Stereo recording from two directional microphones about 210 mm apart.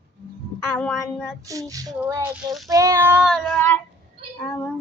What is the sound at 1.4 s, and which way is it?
Child singing, 15° right (ahead or behind).